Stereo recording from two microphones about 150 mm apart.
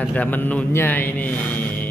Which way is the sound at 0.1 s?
10° left (ahead or behind).